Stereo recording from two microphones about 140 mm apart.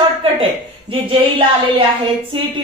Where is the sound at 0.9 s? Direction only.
40° right (ahead or behind).